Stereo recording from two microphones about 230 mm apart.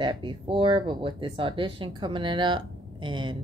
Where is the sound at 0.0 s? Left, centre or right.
Centre.